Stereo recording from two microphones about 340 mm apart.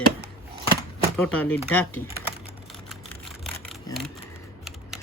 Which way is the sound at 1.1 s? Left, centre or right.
Centre.